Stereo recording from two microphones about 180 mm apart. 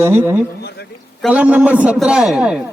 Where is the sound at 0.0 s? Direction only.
10° right (ahead or behind).